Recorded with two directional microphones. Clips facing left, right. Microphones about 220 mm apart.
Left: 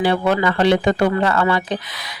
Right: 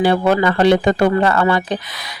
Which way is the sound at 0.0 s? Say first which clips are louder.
Right 3 dB; 45° right (ahead or behind).